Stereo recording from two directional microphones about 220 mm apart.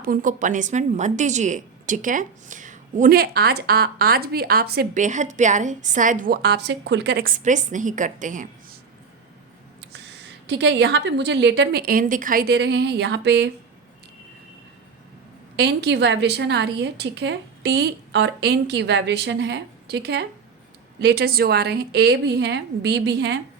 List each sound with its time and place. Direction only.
0.0 s speech: 40° right (ahead or behind)
10.4 s a woman's voice: 55° right (ahead or behind)
15.5 s a woman's voice: 50° right (ahead or behind)